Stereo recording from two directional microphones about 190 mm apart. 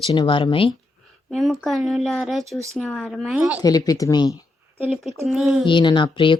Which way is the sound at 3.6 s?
20° left (ahead or behind).